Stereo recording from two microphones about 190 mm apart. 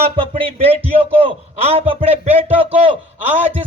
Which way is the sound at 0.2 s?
30° right (ahead or behind).